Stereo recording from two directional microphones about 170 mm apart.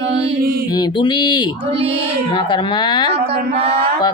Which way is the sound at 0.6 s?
25° left (ahead or behind).